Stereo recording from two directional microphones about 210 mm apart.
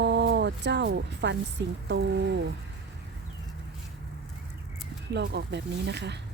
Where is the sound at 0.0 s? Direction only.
55° right (ahead or behind).